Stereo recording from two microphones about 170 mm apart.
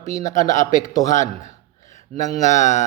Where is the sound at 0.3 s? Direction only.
45° left (ahead or behind).